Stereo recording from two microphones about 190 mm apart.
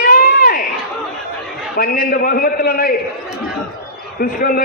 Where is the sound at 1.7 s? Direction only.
50° left (ahead or behind).